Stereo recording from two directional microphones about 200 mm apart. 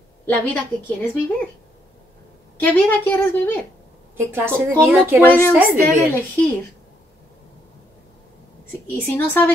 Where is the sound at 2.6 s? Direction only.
10° left (ahead or behind).